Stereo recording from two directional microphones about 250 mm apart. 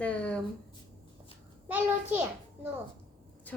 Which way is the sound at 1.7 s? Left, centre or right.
Centre.